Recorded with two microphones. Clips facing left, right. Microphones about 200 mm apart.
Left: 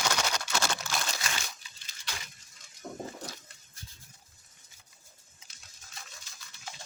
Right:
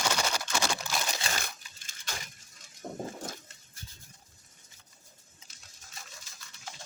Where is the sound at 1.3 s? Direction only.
50° right (ahead or behind).